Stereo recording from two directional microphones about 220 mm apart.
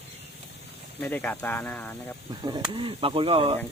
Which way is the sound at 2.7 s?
25° right (ahead or behind).